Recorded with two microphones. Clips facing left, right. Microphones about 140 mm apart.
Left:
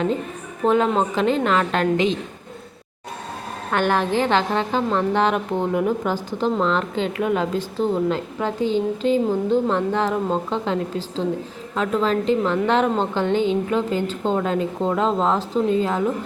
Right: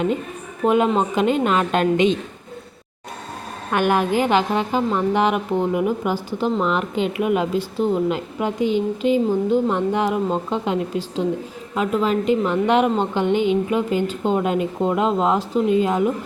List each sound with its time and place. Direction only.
0.6 s a woman's voice: 10° right (ahead or behind)
3.7 s a woman's voice: 15° right (ahead or behind)